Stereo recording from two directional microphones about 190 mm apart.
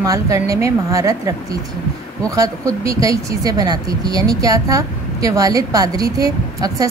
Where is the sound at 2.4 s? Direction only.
15° right (ahead or behind).